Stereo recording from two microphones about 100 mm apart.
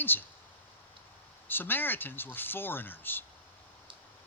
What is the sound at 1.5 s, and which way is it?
A man's voice, 20° left (ahead or behind).